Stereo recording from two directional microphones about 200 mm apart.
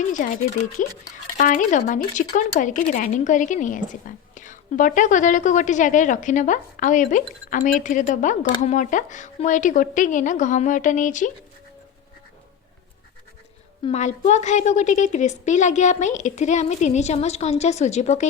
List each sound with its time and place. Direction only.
0.1 s a woman's voice: 40° left (ahead or behind)
13.8 s a woman's voice: 35° left (ahead or behind)